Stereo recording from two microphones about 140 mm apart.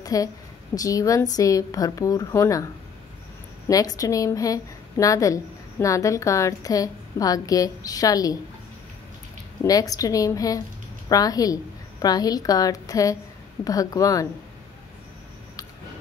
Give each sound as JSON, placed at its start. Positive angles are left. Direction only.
{"t": 0.0, "sound": "a woman's voice", "side_deg": 25}
{"t": 3.6, "sound": "a woman's voice", "side_deg": 25}
{"t": 9.6, "sound": "a woman's voice", "side_deg": 25}